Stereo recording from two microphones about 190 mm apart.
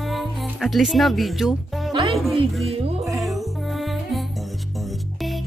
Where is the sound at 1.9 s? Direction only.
30° right (ahead or behind).